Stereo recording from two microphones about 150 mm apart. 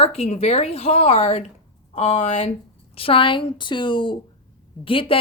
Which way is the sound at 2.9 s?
35° left (ahead or behind).